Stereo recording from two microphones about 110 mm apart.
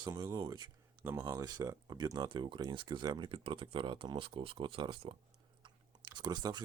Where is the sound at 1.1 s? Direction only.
25° right (ahead or behind); by 5.2 s 50° right (ahead or behind).